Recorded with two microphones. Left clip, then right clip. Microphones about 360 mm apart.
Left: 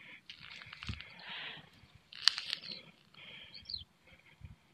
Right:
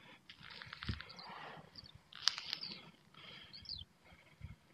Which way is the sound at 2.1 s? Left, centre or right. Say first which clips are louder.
Left 6 dB; centre.